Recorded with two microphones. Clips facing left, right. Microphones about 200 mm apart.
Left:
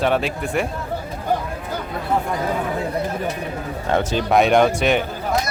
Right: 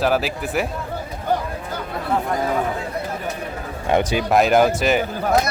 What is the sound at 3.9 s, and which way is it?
Speech, 15° right (ahead or behind).